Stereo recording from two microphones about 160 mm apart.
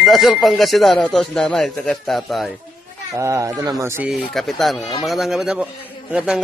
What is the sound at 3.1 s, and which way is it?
Speech, 20° right (ahead or behind).